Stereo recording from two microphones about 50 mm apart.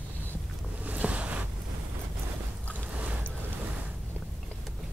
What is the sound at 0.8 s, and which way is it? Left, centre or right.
Boat, right.